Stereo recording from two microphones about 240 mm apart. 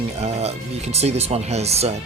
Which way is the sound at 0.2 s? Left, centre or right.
Right.